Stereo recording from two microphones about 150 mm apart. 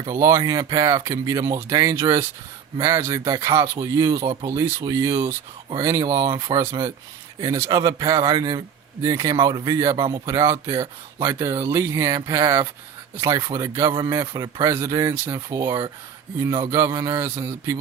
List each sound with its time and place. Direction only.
0.0 s speech: 20° right (ahead or behind)